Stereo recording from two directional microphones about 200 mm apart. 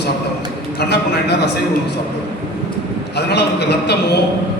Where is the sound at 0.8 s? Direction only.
55° left (ahead or behind).